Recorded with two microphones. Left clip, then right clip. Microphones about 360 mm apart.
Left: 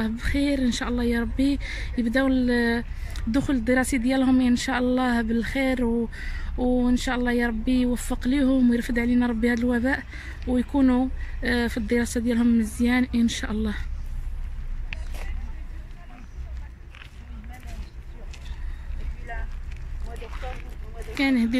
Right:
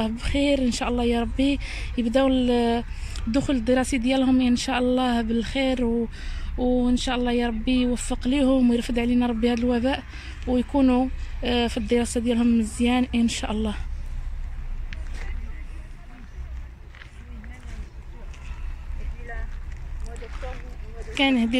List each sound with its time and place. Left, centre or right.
0.0 s speech: centre
19.3 s vehicle: left
21.1 s a woman's voice: centre